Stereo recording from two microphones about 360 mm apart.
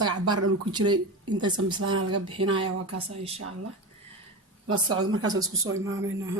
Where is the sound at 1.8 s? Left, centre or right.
Right.